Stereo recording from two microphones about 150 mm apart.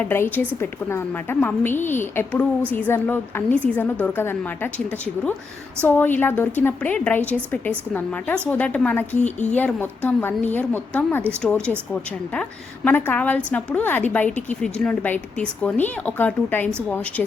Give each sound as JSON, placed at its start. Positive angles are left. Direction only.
{"t": 0.0, "sound": "a woman's voice", "side_deg": 15}
{"t": 9.2, "sound": "speech", "side_deg": 50}
{"t": 9.6, "sound": "a woman's voice", "side_deg": 10}